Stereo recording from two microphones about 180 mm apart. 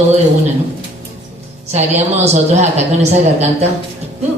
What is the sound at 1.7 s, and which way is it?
A woman's voice, 35° right (ahead or behind).